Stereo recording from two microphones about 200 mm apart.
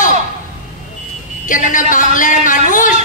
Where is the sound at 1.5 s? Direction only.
40° left (ahead or behind).